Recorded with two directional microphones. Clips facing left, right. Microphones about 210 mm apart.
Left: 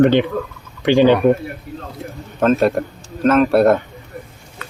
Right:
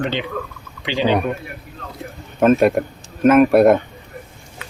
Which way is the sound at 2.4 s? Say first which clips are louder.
Right 1 dB; 10° right (ahead or behind).